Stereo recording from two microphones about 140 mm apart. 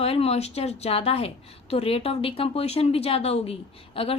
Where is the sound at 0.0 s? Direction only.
45° left (ahead or behind).